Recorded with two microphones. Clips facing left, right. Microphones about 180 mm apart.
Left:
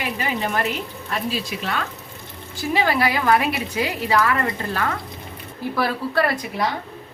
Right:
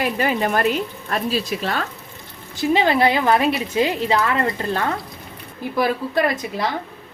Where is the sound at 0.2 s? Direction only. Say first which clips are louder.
Right 3 dB; 50° right (ahead or behind).